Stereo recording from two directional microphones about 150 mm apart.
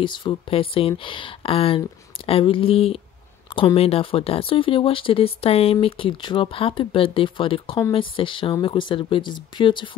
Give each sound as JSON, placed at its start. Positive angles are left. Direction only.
{"t": 0.0, "sound": "speech", "side_deg": 30}